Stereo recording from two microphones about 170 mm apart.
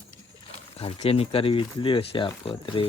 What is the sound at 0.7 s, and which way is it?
Speech, 35° left (ahead or behind).